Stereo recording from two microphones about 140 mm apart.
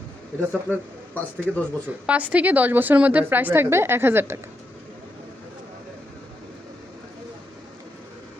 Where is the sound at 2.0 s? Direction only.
10° right (ahead or behind).